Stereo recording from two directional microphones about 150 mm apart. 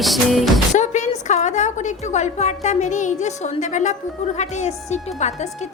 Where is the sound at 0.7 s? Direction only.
55° left (ahead or behind).